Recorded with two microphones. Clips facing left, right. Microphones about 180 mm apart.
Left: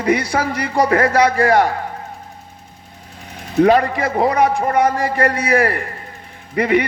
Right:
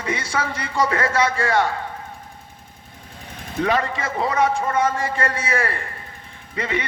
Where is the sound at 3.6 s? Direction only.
35° left (ahead or behind).